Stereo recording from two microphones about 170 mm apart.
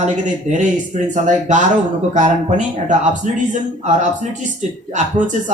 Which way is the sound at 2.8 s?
45° right (ahead or behind).